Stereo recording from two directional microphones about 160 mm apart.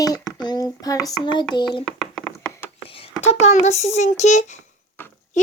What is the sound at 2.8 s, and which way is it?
Speech, 35° left (ahead or behind).